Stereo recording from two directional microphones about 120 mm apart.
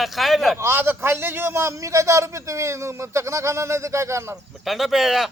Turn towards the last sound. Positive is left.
turn(degrees=0)  # may be behind; listen again after turning